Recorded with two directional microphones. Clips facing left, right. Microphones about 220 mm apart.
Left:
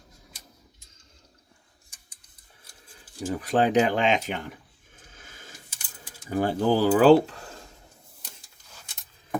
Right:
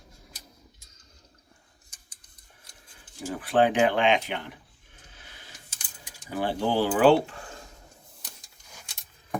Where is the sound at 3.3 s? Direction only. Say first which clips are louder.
Left 1 dB; 40° left (ahead or behind).